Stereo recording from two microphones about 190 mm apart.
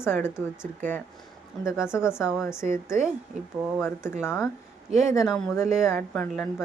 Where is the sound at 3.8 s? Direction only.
5° left (ahead or behind).